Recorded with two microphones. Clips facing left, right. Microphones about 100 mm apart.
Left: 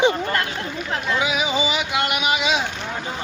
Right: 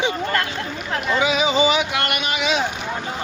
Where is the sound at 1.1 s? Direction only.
5° left (ahead or behind).